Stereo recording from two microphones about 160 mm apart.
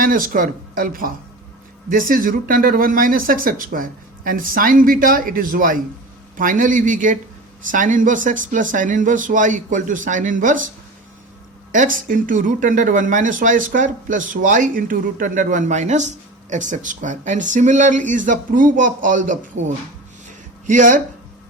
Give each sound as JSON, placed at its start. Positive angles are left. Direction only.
{"t": 0.0, "sound": "speech", "side_deg": -60}
{"t": 11.7, "sound": "speech", "side_deg": -55}
{"t": 20.7, "sound": "speech", "side_deg": -50}